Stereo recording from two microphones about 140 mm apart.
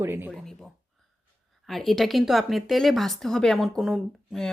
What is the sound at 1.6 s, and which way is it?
A woman's voice, centre (ahead or behind).